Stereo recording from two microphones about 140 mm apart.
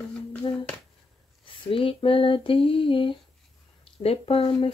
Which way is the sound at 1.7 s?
40° left (ahead or behind).